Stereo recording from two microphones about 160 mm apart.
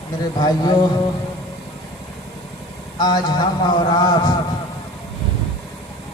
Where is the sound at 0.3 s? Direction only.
25° left (ahead or behind).